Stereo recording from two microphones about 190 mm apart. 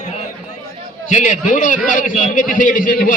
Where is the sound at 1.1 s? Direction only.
40° left (ahead or behind).